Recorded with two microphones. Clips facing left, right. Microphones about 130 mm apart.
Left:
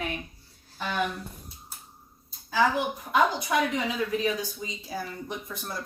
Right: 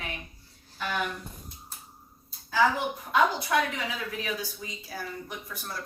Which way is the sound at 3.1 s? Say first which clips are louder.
Even; 15° left (ahead or behind).